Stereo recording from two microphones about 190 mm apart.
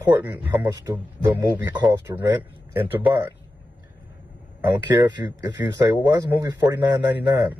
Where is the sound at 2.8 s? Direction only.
10° right (ahead or behind).